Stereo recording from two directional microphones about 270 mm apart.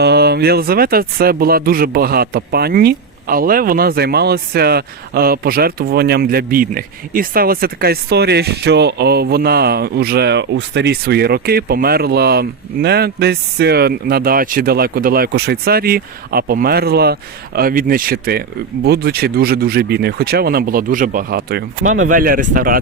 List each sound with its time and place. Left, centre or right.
0.0 s speech: right
21.8 s speech: right
22.1 s speech: right